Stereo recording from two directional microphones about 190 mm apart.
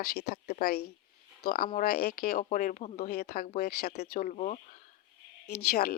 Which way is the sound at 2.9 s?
55° left (ahead or behind).